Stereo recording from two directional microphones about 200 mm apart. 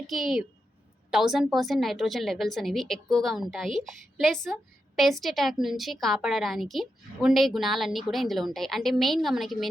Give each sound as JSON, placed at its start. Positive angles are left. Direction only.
{"t": 0.1, "sound": "a woman's voice", "side_deg": 0}